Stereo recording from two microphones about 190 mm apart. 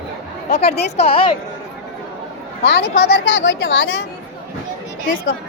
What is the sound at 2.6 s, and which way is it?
Speech, 65° left (ahead or behind).